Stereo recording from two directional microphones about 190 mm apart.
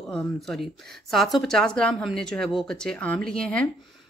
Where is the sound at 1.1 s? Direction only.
Centre (ahead or behind).